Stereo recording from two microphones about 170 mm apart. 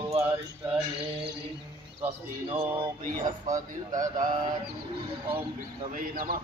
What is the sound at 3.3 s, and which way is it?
Speech, 20° right (ahead or behind).